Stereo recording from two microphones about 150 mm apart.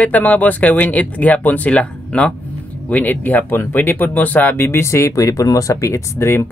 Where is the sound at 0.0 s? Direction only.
10° left (ahead or behind).